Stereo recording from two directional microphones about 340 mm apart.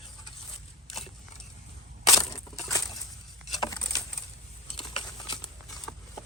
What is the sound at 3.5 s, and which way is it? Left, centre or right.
Patter, centre.